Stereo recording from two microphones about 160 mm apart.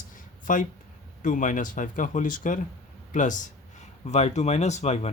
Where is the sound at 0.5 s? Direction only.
55° left (ahead or behind).